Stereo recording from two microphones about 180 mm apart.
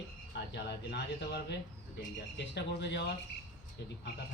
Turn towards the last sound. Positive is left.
turn(degrees=70)  # may be behind; listen again after turning